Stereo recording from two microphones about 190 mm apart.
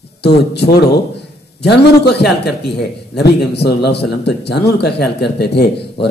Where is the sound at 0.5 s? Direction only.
60° left (ahead or behind).